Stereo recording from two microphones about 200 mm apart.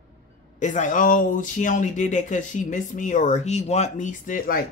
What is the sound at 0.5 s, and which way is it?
Speech, 35° left (ahead or behind).